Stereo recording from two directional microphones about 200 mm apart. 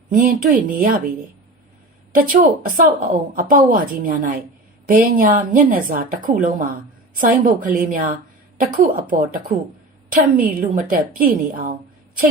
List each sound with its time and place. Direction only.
0.1 s a woman's voice: 45° right (ahead or behind)
2.1 s a woman's voice: 40° right (ahead or behind)